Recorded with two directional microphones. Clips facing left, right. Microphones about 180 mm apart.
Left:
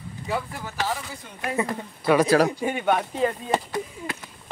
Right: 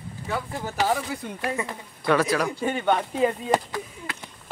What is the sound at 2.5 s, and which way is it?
Speech, 15° left (ahead or behind).